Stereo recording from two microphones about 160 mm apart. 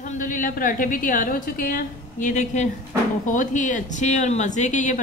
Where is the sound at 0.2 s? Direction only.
55° left (ahead or behind).